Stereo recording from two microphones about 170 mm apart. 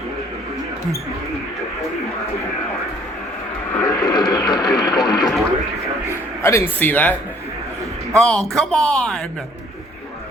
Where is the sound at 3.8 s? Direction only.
20° left (ahead or behind).